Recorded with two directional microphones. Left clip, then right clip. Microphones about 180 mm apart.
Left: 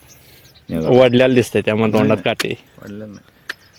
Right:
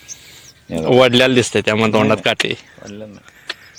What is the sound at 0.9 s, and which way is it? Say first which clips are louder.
Speech: even; 15° left (ahead or behind).